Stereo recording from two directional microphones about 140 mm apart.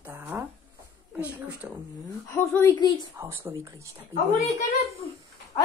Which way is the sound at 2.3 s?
15° left (ahead or behind).